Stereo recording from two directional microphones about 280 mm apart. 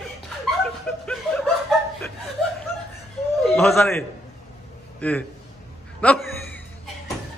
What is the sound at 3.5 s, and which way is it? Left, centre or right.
Speech, centre.